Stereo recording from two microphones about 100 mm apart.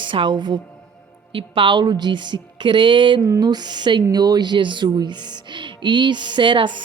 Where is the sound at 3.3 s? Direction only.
40° right (ahead or behind).